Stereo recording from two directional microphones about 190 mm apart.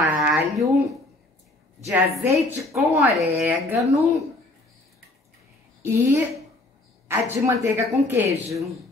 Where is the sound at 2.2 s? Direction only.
15° right (ahead or behind).